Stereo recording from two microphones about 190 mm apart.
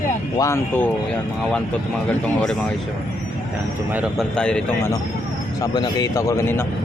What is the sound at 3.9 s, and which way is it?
Speech, 10° right (ahead or behind).